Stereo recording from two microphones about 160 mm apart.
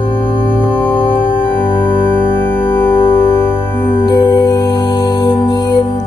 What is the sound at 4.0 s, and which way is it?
Music, 25° left (ahead or behind).